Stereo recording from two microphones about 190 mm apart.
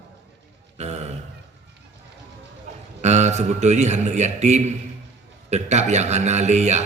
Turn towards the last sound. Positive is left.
turn(degrees=-35)  # may be behind; listen again after turning